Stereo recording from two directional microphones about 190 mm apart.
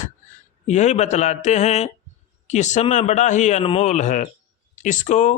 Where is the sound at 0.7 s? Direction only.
35° left (ahead or behind).